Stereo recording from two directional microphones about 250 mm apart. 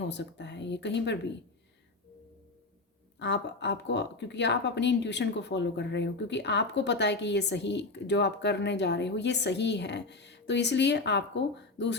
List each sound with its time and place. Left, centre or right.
0.0 s speech: left
3.2 s speech: left